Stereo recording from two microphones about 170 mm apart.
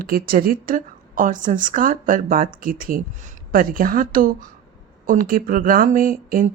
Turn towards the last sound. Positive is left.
turn(degrees=-55)  # may be behind; listen again after turning